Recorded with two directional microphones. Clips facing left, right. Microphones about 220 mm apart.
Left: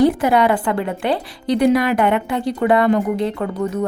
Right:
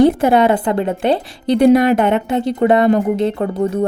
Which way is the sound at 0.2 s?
25° right (ahead or behind).